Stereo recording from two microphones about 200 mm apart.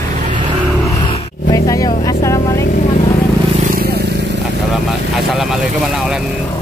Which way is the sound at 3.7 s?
50° right (ahead or behind).